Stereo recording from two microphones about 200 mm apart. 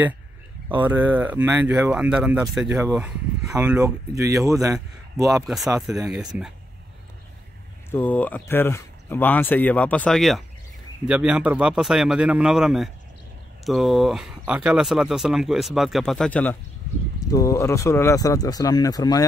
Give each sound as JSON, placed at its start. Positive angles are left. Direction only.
{"t": 0.7, "sound": "speech", "side_deg": -10}
{"t": 5.8, "sound": "speech", "side_deg": 0}
{"t": 7.9, "sound": "speech", "side_deg": 10}